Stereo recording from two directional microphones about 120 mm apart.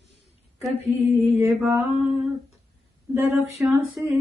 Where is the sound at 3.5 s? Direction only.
Centre (ahead or behind).